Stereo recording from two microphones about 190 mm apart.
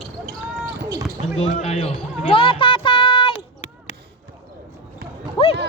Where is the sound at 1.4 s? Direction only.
35° left (ahead or behind).